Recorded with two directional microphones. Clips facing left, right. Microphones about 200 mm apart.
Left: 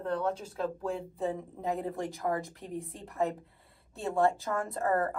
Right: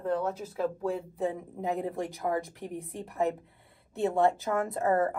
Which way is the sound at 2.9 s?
15° right (ahead or behind).